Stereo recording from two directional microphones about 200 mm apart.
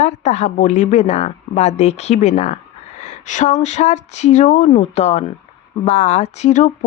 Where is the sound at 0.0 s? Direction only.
35° left (ahead or behind).